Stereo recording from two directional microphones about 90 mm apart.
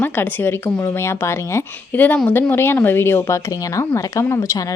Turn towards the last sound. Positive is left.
turn(degrees=35)  # may be behind; listen again after turning